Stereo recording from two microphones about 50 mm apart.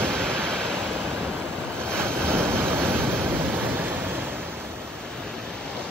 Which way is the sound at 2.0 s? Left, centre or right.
Right.